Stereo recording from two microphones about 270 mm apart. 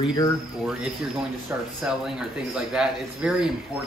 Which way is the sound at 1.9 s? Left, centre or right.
Centre.